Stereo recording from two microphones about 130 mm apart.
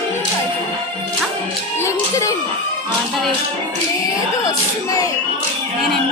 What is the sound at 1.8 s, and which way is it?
Music, 20° left (ahead or behind).